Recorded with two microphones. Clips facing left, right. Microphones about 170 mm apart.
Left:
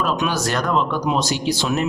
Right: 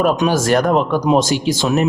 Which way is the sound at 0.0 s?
45° right (ahead or behind).